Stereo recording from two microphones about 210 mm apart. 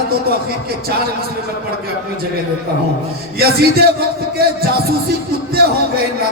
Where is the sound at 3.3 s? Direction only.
50° right (ahead or behind).